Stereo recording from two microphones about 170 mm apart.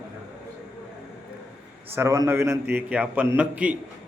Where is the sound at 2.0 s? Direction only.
15° right (ahead or behind).